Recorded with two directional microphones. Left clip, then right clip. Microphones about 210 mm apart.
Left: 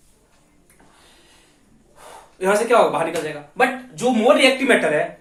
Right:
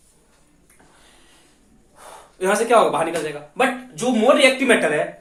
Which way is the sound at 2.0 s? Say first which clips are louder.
Right 1 dB; 15° right (ahead or behind).